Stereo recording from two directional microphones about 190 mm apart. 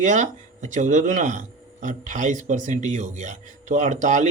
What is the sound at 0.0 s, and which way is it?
Speech, 40° right (ahead or behind).